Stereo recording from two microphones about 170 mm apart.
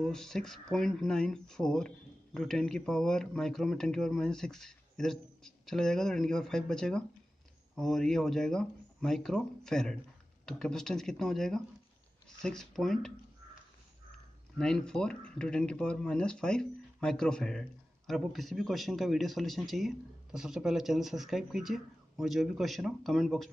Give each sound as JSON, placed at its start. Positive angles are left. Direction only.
{"t": 0.0, "sound": "speech", "side_deg": 5}
{"t": 14.6, "sound": "speech", "side_deg": 5}